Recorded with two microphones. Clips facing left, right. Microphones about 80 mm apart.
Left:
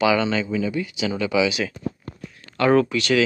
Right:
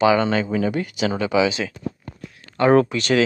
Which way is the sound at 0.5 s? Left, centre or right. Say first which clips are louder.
Right 2 dB; right.